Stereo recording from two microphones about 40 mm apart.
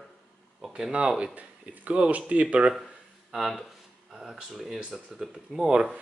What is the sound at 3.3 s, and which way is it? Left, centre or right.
Speech, centre.